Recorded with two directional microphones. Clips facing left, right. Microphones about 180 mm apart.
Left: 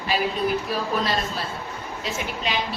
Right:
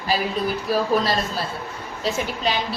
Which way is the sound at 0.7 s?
40° right (ahead or behind).